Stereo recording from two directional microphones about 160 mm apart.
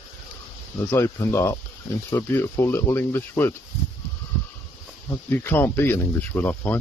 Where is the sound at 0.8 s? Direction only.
15° left (ahead or behind).